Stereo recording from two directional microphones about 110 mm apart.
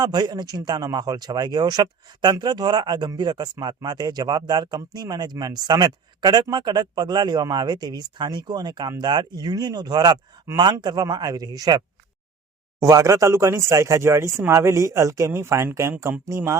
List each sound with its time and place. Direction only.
0.0 s a man's voice: 40° right (ahead or behind)
12.8 s speech: 30° right (ahead or behind)